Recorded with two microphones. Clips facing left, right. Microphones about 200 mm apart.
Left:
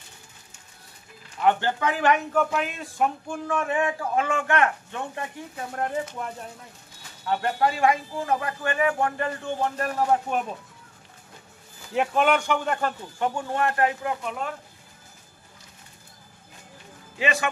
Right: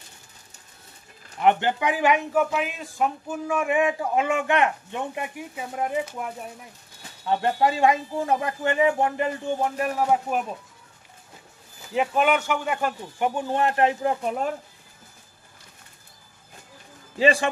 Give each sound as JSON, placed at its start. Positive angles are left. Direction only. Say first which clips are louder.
{"t": 1.4, "sound": "a man's voice", "louder": "right 2 dB", "side_deg": -20}
{"t": 7.2, "sound": "speech", "louder": "right 2 dB", "side_deg": -20}
{"t": 11.9, "sound": "speech", "louder": "even", "side_deg": 0}
{"t": 17.2, "sound": "a man's voice", "louder": "right 6 dB", "side_deg": -30}